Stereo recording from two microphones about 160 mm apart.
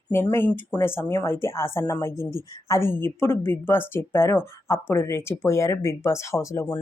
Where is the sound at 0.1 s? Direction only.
15° left (ahead or behind).